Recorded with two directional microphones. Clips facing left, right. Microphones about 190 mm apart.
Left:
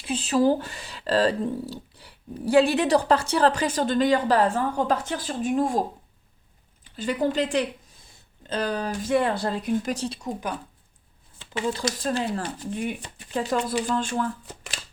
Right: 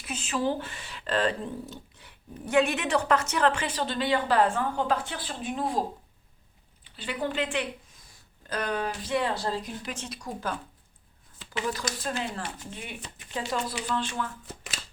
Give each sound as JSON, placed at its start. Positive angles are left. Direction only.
{"t": 0.0, "sound": "speech", "side_deg": 35}
{"t": 6.9, "sound": "speech", "side_deg": 40}
{"t": 9.9, "sound": "speech", "side_deg": 35}
{"t": 10.2, "sound": "speech", "side_deg": 20}